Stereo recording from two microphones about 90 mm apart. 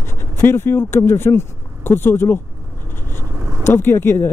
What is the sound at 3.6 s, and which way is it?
Speech, 25° left (ahead or behind).